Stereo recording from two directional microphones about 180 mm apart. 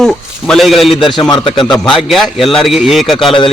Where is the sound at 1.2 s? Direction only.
25° left (ahead or behind).